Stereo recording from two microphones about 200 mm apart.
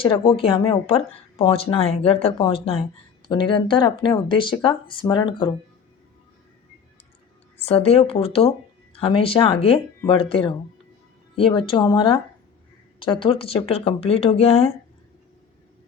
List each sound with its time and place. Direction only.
0.0 s speech: 25° left (ahead or behind)
7.6 s speech: 30° left (ahead or behind)